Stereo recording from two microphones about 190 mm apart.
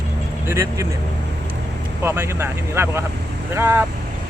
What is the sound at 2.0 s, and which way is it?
Speech, 15° right (ahead or behind).